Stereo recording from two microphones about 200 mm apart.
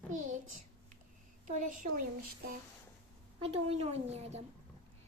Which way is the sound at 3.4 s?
30° right (ahead or behind).